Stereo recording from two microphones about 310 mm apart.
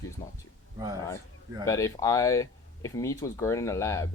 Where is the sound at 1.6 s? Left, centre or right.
Centre.